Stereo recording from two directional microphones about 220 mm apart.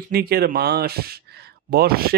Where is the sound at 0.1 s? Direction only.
45° right (ahead or behind).